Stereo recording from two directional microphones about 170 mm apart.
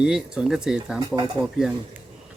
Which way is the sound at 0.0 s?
5° right (ahead or behind).